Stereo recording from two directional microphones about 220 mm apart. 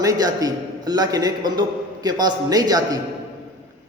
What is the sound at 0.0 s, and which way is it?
A man's voice, 15° right (ahead or behind).